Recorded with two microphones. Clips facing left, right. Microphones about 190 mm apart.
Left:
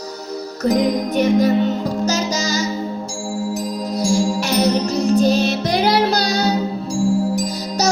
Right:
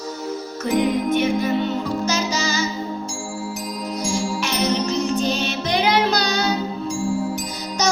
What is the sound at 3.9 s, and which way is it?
Music, 35° left (ahead or behind).